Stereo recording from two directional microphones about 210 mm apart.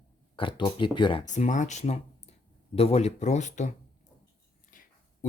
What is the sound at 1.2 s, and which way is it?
Speech, 35° left (ahead or behind).